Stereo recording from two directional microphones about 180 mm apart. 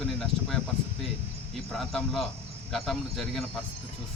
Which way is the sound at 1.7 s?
Centre (ahead or behind).